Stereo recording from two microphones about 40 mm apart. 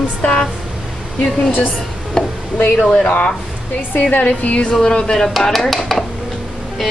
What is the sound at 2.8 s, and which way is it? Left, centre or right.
Speech, centre.